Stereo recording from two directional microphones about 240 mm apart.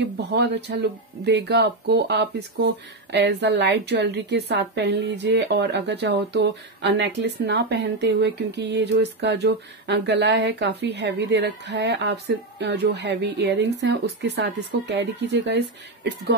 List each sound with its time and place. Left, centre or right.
0.0 s speech: right